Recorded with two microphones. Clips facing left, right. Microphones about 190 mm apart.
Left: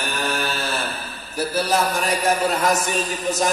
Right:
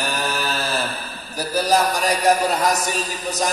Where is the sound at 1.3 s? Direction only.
40° right (ahead or behind).